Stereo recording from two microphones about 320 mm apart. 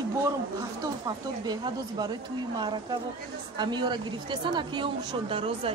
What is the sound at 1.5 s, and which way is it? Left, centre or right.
A woman's voice, centre.